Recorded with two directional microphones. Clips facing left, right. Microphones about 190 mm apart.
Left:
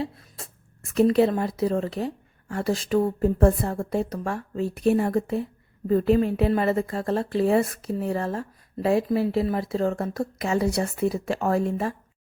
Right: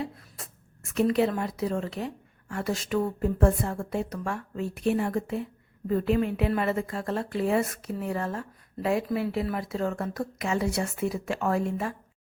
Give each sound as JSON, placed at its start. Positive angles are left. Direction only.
{"t": 0.0, "sound": "a woman's voice", "side_deg": 30}